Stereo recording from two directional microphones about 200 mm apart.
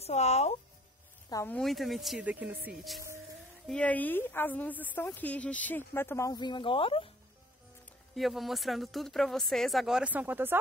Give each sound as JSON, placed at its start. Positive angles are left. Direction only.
{"t": 0.0, "sound": "speech", "side_deg": 35}
{"t": 1.3, "sound": "a woman's voice", "side_deg": 15}
{"t": 1.6, "sound": "speech", "side_deg": 0}
{"t": 3.6, "sound": "a woman's voice", "side_deg": 5}
{"t": 8.1, "sound": "speech", "side_deg": 0}